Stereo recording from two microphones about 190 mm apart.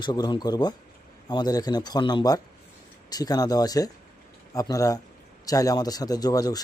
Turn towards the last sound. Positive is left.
turn(degrees=20)  # may be behind; listen again after turning